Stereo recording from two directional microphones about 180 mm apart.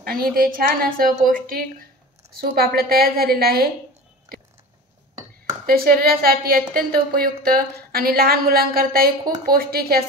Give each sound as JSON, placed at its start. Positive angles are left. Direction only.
{"t": 0.0, "sound": "a woman's voice", "side_deg": -55}
{"t": 5.7, "sound": "a woman's voice", "side_deg": -55}